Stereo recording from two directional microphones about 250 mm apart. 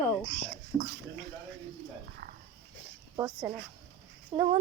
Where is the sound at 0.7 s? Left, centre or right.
Centre.